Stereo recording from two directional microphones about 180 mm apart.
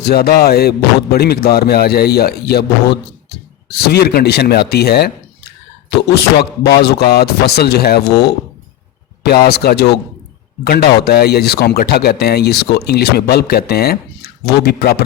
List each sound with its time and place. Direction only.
0.0 s speech: 60° left (ahead or behind)